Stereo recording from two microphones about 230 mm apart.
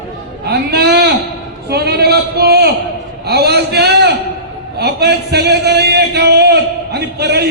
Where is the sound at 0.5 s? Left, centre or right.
Right.